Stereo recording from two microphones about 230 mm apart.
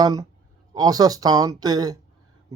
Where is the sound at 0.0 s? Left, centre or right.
Centre.